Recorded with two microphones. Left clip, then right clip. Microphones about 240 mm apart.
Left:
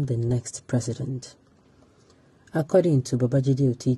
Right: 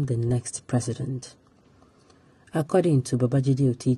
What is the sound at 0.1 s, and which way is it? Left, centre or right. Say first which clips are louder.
Speech: even; centre.